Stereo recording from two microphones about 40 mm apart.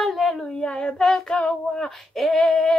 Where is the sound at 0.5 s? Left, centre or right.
Left.